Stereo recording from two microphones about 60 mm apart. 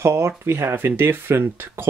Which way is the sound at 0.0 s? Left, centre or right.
Right.